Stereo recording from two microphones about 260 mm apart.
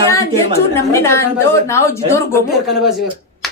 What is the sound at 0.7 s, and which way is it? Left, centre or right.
A woman's voice, centre.